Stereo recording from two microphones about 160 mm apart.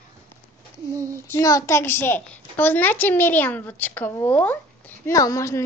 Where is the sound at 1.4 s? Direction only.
20° left (ahead or behind).